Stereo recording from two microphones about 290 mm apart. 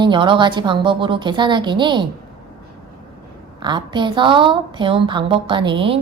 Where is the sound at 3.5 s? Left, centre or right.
Centre.